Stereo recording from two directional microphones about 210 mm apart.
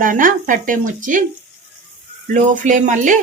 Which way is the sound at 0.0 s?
40° right (ahead or behind).